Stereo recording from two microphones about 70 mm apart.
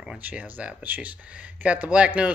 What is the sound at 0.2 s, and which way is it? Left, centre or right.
Speech, right.